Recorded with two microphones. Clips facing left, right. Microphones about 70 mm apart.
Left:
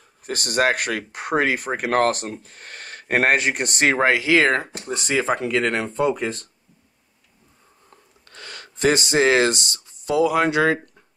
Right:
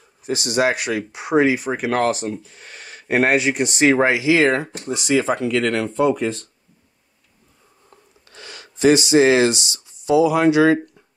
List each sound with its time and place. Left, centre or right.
0.2 s speech: left
8.3 s speech: left